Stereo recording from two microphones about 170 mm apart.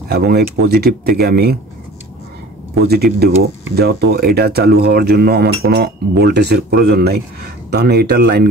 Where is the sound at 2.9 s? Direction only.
70° right (ahead or behind).